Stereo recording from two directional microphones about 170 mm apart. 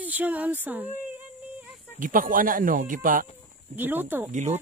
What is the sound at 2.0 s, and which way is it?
Speech, 55° right (ahead or behind).